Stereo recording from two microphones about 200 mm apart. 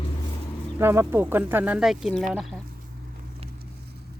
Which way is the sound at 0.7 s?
10° right (ahead or behind).